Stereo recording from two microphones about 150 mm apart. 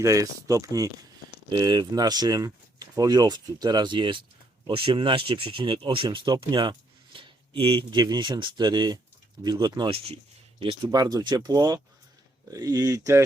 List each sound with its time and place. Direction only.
0.0 s speech: 20° right (ahead or behind)